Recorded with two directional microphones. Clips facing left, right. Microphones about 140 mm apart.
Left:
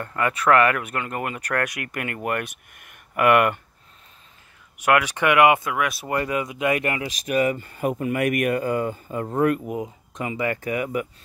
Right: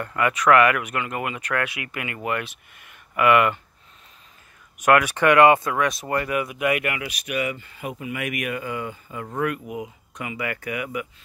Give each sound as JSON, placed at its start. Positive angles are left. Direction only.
{"t": 0.0, "sound": "speech", "side_deg": 30}
{"t": 4.8, "sound": "speech", "side_deg": 15}
{"t": 6.0, "sound": "speech", "side_deg": 20}